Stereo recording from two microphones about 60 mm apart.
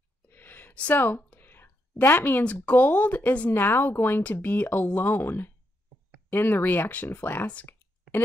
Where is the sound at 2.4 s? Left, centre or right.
Left.